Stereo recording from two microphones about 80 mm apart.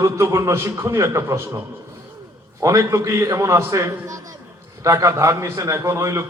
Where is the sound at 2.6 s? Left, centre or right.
Right.